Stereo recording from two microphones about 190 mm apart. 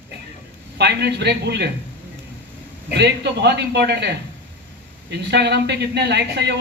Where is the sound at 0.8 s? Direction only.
60° right (ahead or behind).